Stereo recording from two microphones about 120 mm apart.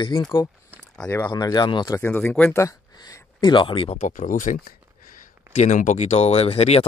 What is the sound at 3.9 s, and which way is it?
Speech, 90° left.